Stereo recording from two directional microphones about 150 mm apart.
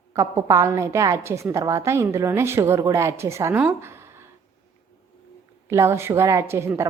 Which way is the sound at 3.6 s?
15° right (ahead or behind).